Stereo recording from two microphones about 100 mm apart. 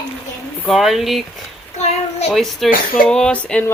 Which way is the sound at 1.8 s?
90° left.